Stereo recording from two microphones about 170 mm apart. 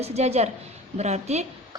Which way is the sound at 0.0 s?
40° right (ahead or behind).